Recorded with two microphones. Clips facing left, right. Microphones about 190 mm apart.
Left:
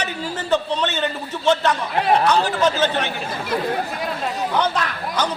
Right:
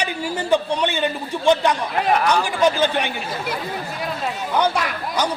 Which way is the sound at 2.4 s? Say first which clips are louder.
Right 1 dB; 15° right (ahead or behind).